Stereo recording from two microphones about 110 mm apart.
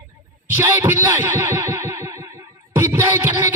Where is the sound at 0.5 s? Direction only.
20° right (ahead or behind).